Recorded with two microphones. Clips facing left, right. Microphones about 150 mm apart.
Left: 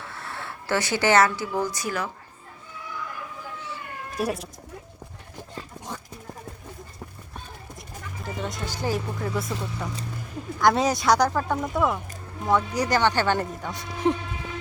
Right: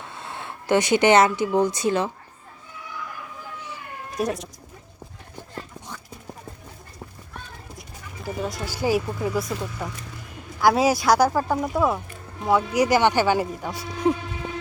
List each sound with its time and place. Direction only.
0.0 s speech: 20° right (ahead or behind)
4.2 s speech: 5° left (ahead or behind)
7.8 s speech: 5° right (ahead or behind)